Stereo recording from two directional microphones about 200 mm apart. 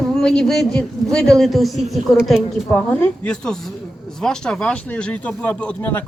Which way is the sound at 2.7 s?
10° left (ahead or behind).